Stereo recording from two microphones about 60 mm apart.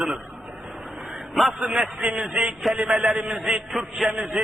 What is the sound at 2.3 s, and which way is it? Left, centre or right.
Speech, centre.